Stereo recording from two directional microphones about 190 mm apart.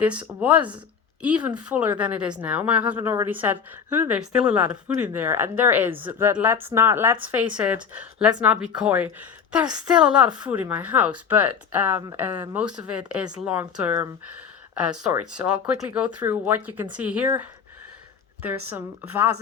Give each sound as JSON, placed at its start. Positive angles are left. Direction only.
{"t": 0.0, "sound": "speech", "side_deg": -5}
{"t": 9.6, "sound": "a woman's voice", "side_deg": -20}
{"t": 9.9, "sound": "speech", "side_deg": -5}
{"t": 15.3, "sound": "speech", "side_deg": -5}